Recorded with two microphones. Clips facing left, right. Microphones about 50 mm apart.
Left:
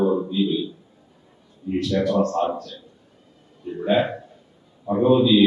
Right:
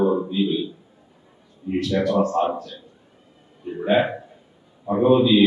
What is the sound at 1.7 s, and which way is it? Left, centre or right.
A man's voice, centre.